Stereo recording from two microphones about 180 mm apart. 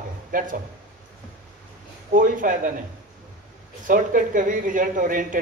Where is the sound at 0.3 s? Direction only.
50° right (ahead or behind).